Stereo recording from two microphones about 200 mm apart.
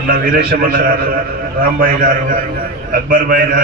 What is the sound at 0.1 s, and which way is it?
A man's voice, 45° right (ahead or behind).